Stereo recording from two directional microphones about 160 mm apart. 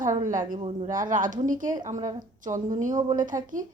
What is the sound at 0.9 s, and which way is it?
A woman's voice, 55° right (ahead or behind).